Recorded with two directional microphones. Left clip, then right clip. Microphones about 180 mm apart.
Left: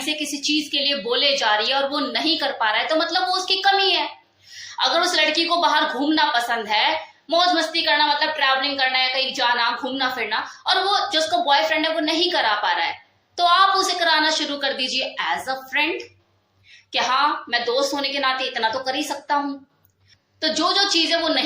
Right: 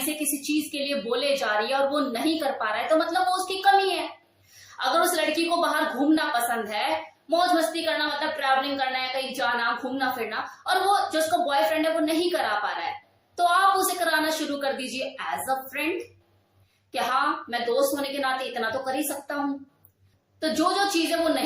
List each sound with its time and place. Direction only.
0.2 s a woman's voice: 15° right (ahead or behind)
13.3 s female singing: 20° right (ahead or behind)
14.0 s a woman's voice: 15° right (ahead or behind)
17.5 s a woman's voice: 15° right (ahead or behind)
20.4 s a woman's voice: 20° right (ahead or behind)